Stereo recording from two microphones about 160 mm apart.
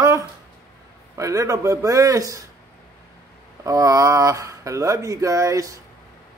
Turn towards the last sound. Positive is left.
turn(degrees=-20)  # may be behind; listen again after turning